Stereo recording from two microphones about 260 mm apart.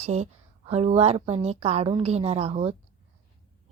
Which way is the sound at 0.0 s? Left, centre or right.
Right.